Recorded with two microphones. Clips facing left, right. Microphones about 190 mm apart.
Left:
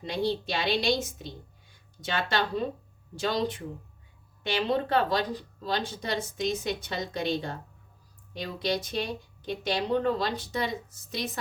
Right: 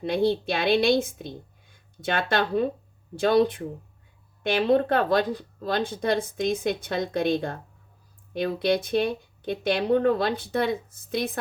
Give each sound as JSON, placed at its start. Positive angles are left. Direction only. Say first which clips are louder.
{"t": 0.0, "sound": "speech", "louder": "right 6 dB", "side_deg": -55}